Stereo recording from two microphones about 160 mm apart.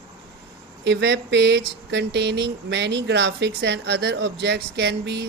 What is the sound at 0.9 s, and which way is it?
Speech, 90° right.